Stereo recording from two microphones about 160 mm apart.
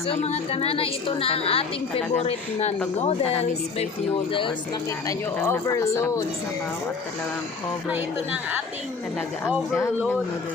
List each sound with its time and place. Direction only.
0.1 s a woman's voice: 40° left (ahead or behind)
5.0 s speech: 15° left (ahead or behind)